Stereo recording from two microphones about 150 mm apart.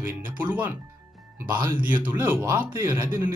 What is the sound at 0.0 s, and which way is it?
Speech, 15° right (ahead or behind).